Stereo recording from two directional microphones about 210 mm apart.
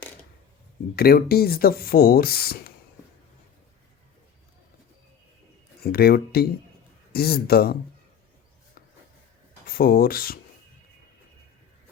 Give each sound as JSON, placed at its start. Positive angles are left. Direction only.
{"t": 0.9, "sound": "speech", "side_deg": 45}
{"t": 5.8, "sound": "speech", "side_deg": 50}
{"t": 9.6, "sound": "speech", "side_deg": 45}